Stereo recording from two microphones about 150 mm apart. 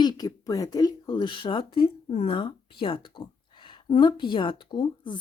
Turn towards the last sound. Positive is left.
turn(degrees=30)  # may be behind; listen again after turning